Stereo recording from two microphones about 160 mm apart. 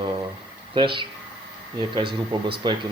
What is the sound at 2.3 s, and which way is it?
Speech, 30° right (ahead or behind).